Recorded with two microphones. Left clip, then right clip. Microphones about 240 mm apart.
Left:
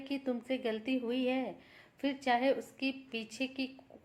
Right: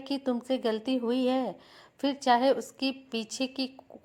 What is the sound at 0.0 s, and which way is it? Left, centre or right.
Speech, right.